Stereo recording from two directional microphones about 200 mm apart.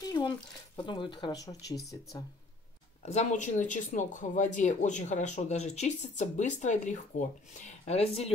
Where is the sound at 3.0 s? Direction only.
35° left (ahead or behind).